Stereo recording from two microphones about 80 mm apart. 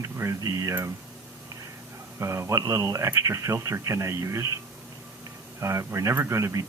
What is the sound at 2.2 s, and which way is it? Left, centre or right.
Speech, right.